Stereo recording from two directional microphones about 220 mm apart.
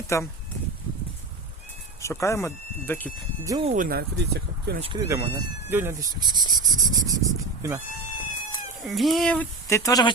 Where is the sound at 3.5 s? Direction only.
20° right (ahead or behind).